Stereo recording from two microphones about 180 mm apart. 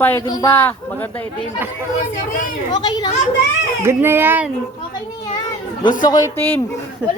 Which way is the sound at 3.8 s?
15° right (ahead or behind).